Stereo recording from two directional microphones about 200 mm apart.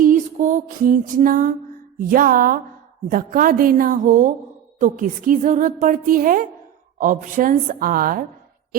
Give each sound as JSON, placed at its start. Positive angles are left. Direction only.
{"t": 0.0, "sound": "music", "side_deg": -40}
{"t": 2.0, "sound": "speech", "side_deg": -45}